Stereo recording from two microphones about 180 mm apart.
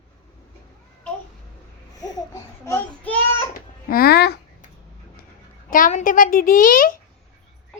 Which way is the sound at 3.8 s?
60° left (ahead or behind).